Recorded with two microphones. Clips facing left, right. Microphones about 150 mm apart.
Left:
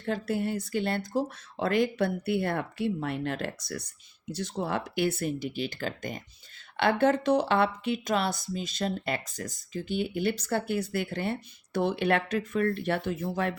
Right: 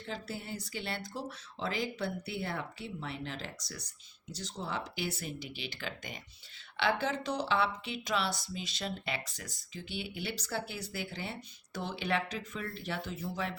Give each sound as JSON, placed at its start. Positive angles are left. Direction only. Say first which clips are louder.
{"t": 0.0, "sound": "speech", "louder": "left 11 dB", "side_deg": 55}